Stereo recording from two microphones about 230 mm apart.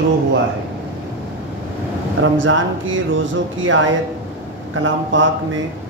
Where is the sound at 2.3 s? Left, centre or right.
Right.